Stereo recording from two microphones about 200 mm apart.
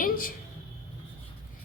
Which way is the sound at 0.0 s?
45° left (ahead or behind).